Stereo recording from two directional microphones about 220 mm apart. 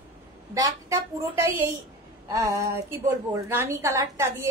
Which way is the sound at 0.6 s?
15° right (ahead or behind).